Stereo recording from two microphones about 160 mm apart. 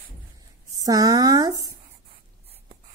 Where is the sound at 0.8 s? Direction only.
20° right (ahead or behind).